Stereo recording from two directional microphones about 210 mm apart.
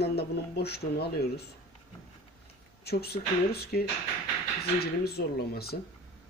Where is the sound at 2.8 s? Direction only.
50° left (ahead or behind).